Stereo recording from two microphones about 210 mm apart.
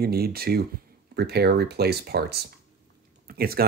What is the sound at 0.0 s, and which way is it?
Speech, 45° right (ahead or behind).